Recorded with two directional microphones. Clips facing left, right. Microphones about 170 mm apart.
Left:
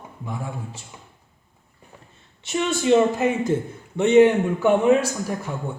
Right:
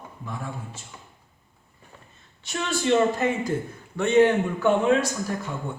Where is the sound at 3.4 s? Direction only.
20° left (ahead or behind).